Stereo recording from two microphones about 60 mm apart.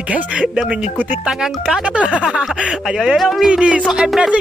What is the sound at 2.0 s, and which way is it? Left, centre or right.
Speech, right.